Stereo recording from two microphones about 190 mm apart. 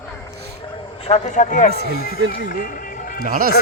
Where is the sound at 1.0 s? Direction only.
35° left (ahead or behind).